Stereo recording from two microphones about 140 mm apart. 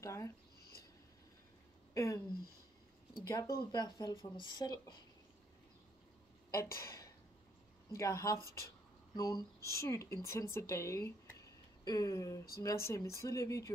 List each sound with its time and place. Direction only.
0.0 s speech: 20° left (ahead or behind)
2.0 s speech: 20° left (ahead or behind)
3.7 s speech: 30° left (ahead or behind)
6.5 s speech: 20° left (ahead or behind)